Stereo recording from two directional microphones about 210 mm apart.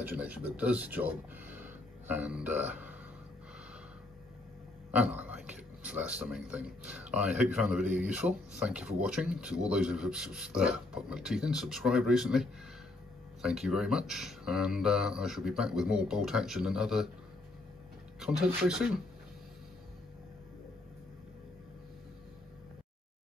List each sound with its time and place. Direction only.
0.0 s speech: 10° right (ahead or behind)
4.9 s a man's voice: 5° right (ahead or behind)
18.2 s a man's voice: 5° right (ahead or behind)